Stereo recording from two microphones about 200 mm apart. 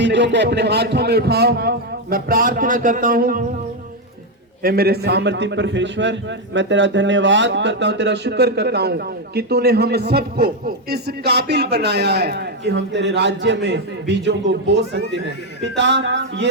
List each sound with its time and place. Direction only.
0.0 s a man's voice: 60° right (ahead or behind); by 3.4 s 45° right (ahead or behind)
4.6 s a man's voice: 50° right (ahead or behind)